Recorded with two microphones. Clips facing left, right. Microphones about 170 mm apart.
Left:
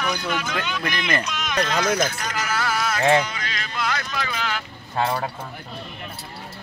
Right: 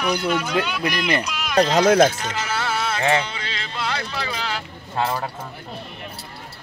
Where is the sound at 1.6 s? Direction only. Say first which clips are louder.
Right 8 dB; 30° right (ahead or behind).